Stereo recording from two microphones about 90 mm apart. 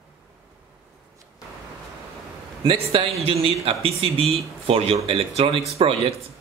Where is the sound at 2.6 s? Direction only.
85° right.